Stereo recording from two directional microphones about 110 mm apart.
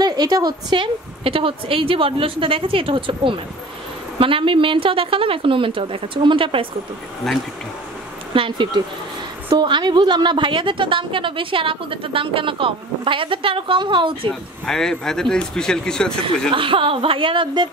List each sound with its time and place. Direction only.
0.0 s a woman's voice: 40° right (ahead or behind)
8.3 s a woman's voice: 50° right (ahead or behind)
14.7 s speech: 5° left (ahead or behind)
16.5 s a woman's voice: 55° right (ahead or behind)